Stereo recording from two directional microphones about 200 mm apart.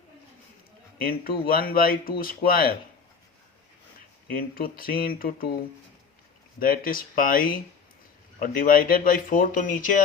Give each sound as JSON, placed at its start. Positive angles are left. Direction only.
{"t": 1.0, "sound": "speech", "side_deg": 45}
{"t": 4.3, "sound": "speech", "side_deg": 45}
{"t": 6.6, "sound": "speech", "side_deg": 45}